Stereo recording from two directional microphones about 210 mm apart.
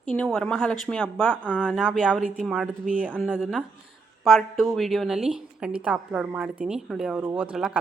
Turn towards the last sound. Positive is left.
turn(degrees=-5)  # may be behind; listen again after turning